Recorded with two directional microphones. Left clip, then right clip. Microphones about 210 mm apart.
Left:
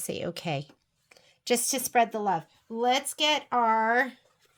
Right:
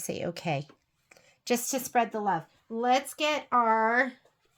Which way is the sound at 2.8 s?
75° left (ahead or behind).